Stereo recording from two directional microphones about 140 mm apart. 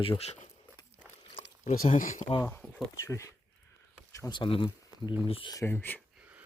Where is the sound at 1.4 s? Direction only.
65° left (ahead or behind).